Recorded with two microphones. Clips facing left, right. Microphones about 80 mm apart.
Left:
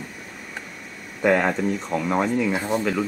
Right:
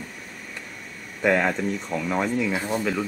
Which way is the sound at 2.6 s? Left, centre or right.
Centre.